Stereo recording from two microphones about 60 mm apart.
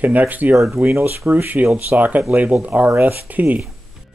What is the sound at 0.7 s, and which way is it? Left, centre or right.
Speech, right.